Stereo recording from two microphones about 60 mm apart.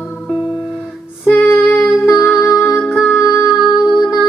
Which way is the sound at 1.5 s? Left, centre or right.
Left.